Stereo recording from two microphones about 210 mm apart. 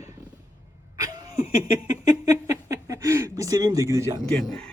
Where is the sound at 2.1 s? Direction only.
15° right (ahead or behind).